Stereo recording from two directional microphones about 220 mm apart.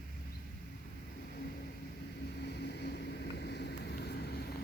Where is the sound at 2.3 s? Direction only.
50° left (ahead or behind).